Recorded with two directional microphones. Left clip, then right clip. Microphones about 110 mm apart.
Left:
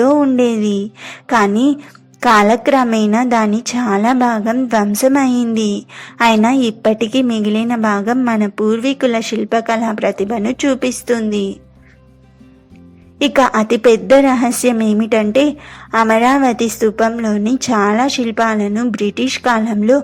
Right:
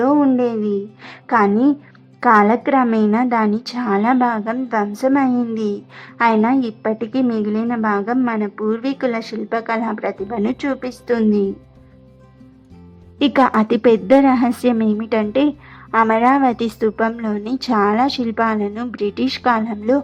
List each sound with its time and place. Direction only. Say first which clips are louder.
0.2 s a woman's voice: left 3 dB; 25° left (ahead or behind)
2.2 s a woman's voice: left 2 dB; 50° left (ahead or behind)
2.6 s a woman's voice: left 3 dB; 35° left (ahead or behind)
3.1 s a woman's voice: left 3 dB; 45° left (ahead or behind)
5.3 s a woman's voice: left 4 dB; 20° left (ahead or behind)
6.1 s a woman's voice: left 3 dB; 45° left (ahead or behind)
7.3 s a woman's voice: left 3 dB; 50° left (ahead or behind)
8.7 s a woman's voice: left 5 dB; 20° left (ahead or behind)
9.0 s a woman's voice: left 6 dB; 35° left (ahead or behind)
9.8 s a woman's voice: left 6 dB; 45° left (ahead or behind)
13.1 s a woman's voice: left 3 dB; 35° left (ahead or behind)
14.1 s a woman's voice: left 3 dB; 35° left (ahead or behind)